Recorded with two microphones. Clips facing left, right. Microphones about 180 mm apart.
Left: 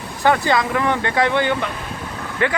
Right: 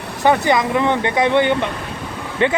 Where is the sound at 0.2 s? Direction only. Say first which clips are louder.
Right 2 dB; 20° right (ahead or behind).